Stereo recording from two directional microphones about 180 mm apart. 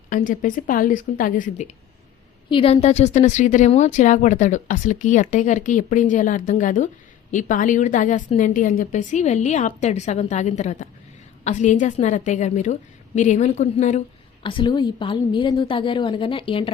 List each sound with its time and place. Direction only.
0.1 s speech: 50° left (ahead or behind)
2.5 s a woman's voice: 30° left (ahead or behind)
14.4 s a woman's voice: 25° left (ahead or behind)